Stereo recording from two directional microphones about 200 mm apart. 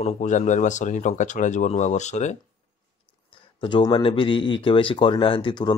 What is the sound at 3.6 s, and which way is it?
Speech, 25° left (ahead or behind).